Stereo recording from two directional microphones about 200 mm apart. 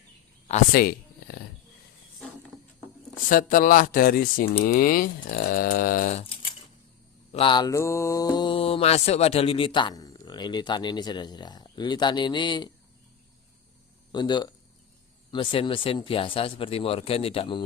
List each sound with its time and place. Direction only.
0.7 s a sound: 50° left (ahead or behind)
3.2 s speech: 45° left (ahead or behind)
7.3 s mantra: 25° left (ahead or behind)
14.1 s mantra: 20° left (ahead or behind)